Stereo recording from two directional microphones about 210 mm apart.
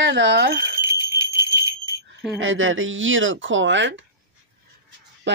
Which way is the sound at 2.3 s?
70° right (ahead or behind).